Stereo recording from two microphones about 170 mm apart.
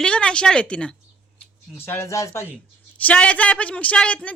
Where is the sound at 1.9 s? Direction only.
15° left (ahead or behind).